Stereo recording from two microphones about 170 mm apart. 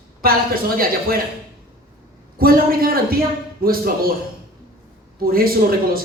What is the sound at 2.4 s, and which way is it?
A woman's voice, 60° right (ahead or behind).